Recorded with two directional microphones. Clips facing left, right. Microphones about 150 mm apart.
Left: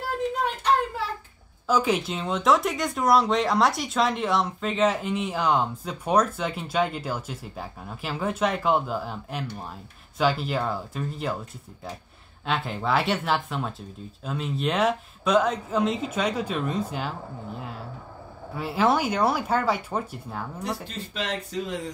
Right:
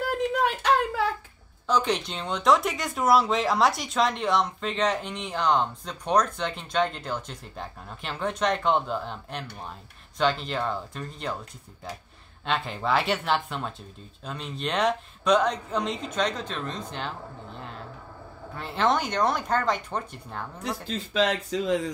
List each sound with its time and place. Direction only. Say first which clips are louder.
0.4 s a sound: even; 90° right
1.7 s speech: left 2 dB; 5° left (ahead or behind)
12.4 s speech: even; centre (ahead or behind)
20.8 s speech: right 7 dB; 90° right